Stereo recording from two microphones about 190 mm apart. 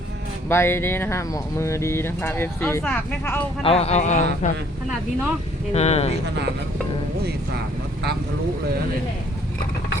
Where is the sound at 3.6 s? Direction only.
30° left (ahead or behind).